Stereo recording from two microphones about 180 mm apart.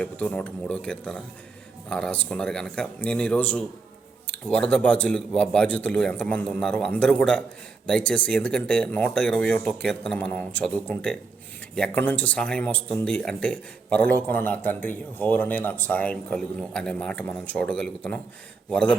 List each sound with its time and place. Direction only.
0.0 s speech: 5° left (ahead or behind)